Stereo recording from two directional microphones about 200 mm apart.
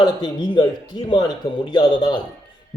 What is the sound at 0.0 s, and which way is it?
Speech, 20° left (ahead or behind).